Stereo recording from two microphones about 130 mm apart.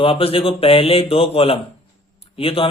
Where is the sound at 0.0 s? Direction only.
45° left (ahead or behind).